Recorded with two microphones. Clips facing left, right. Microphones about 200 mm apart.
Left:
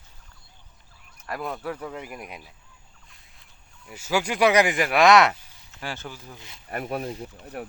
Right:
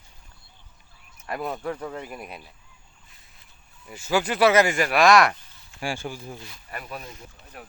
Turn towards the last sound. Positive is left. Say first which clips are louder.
# left 9 dB
turn(degrees=65)  # may be behind; listen again after turning